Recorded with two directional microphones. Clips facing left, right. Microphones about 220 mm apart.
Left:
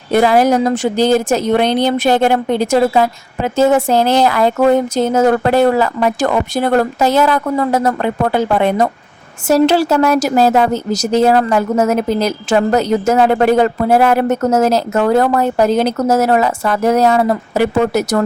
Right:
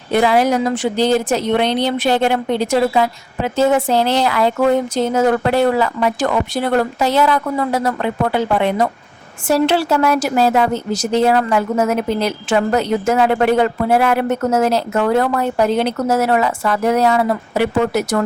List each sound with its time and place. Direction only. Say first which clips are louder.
0.1 s a woman's voice: left 3 dB; 45° left (ahead or behind)